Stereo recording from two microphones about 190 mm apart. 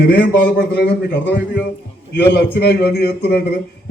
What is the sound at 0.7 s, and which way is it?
A man's voice, 60° left (ahead or behind).